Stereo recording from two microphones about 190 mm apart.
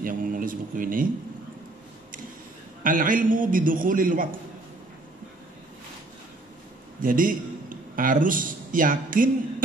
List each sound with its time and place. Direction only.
0.0 s a man's voice: 45° right (ahead or behind)
2.8 s a man's voice: 45° right (ahead or behind)
7.0 s a man's voice: 45° right (ahead or behind)